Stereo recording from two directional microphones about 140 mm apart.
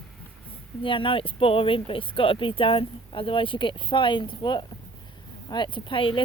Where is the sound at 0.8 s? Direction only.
40° left (ahead or behind).